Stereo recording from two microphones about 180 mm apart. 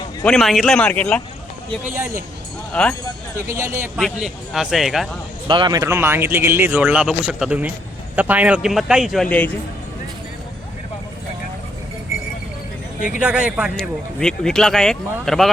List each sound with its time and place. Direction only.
0.3 s speech: centre (ahead or behind)
3.5 s speech: 15° right (ahead or behind)
3.9 s speech: 5° right (ahead or behind)
5.5 s speech: 25° right (ahead or behind); by 9.5 s 5° left (ahead or behind)
13.1 s speech: 5° right (ahead or behind)